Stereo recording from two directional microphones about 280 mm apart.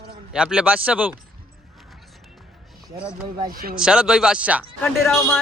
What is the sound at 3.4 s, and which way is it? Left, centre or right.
Speech, right.